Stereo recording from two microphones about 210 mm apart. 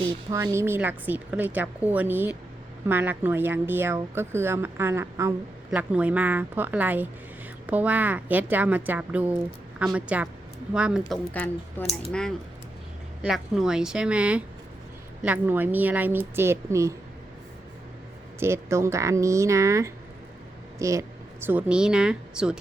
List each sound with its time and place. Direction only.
0.0 s speech: 15° right (ahead or behind)
11.1 s a woman's voice: 10° left (ahead or behind)
13.2 s speech: centre (ahead or behind)
18.3 s speech: 10° right (ahead or behind)